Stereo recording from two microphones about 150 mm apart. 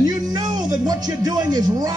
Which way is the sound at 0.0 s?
25° right (ahead or behind).